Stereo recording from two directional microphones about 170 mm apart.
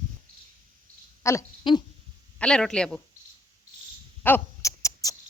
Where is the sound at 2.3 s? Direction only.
5° left (ahead or behind).